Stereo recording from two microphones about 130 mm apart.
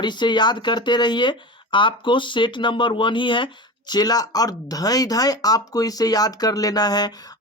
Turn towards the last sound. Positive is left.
turn(degrees=30)  # may be behind; listen again after turning